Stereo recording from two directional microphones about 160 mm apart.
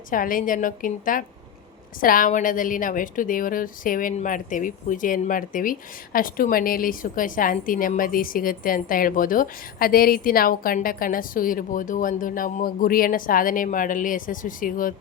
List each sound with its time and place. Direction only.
0.1 s a woman's voice: 60° left (ahead or behind)